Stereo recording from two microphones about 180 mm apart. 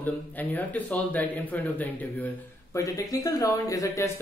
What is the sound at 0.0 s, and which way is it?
A man's voice, 10° left (ahead or behind).